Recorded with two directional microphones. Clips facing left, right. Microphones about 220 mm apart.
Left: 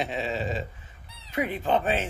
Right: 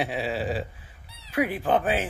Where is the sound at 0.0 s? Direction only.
10° right (ahead or behind).